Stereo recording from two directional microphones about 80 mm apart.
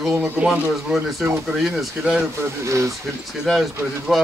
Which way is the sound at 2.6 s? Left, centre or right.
Right.